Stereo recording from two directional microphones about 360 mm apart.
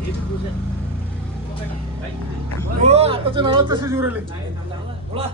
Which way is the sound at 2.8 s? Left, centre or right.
Centre.